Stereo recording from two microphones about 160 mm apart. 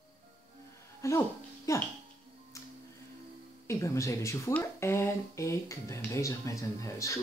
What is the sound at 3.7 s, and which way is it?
Speech, 20° left (ahead or behind).